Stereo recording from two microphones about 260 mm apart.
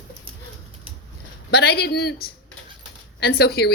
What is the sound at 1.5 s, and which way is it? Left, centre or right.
A woman's voice, left.